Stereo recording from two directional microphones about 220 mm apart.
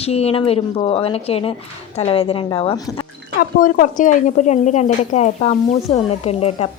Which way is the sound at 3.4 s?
40° left (ahead or behind).